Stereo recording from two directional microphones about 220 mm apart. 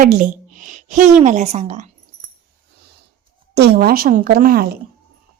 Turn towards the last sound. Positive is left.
turn(degrees=-40)  # may be behind; listen again after turning